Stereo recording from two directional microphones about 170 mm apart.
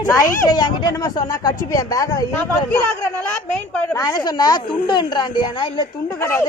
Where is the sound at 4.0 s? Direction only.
20° left (ahead or behind).